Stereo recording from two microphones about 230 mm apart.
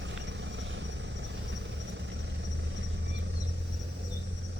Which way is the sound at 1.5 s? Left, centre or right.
Right.